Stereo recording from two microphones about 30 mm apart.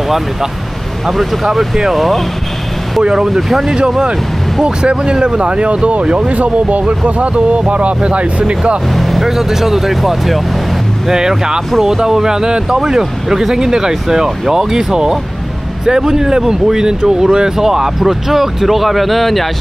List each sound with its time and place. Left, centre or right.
1.0 s speech: centre
3.0 s speech: right
3.3 s speech: centre
4.6 s speech: right
8.9 s speech: centre
9.3 s speech: centre
11.1 s speech: centre